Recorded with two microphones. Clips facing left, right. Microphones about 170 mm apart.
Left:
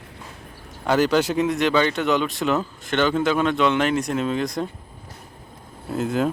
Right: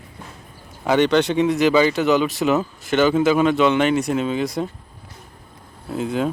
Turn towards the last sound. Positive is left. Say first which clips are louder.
# even
turn(degrees=0)  # may be behind; listen again after turning